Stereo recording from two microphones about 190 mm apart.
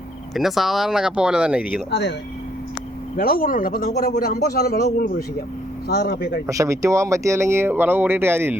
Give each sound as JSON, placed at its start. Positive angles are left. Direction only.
{"t": 0.3, "sound": "speech", "side_deg": 0}
{"t": 1.9, "sound": "a man's voice", "side_deg": 65}
{"t": 3.2, "sound": "a man's voice", "side_deg": 50}
{"t": 6.5, "sound": "speech", "side_deg": -15}